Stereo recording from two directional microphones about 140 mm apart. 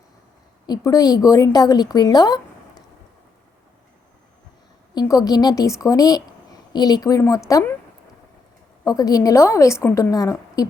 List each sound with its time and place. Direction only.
0.7 s a woman's voice: 25° left (ahead or behind)
4.9 s a woman's voice: 25° left (ahead or behind)
8.8 s a woman's voice: 25° left (ahead or behind)